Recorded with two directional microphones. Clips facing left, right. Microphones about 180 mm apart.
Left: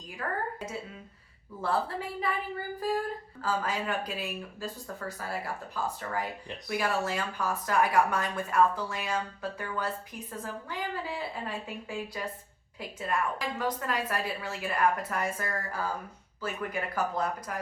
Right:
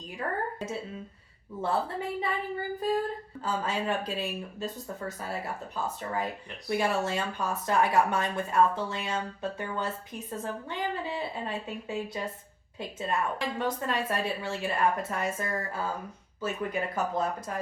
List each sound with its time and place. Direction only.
0.2 s speech: 25° right (ahead or behind)